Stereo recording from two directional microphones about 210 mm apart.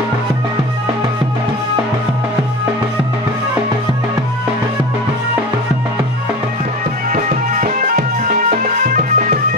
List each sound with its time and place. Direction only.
7.1 s music: 40° right (ahead or behind)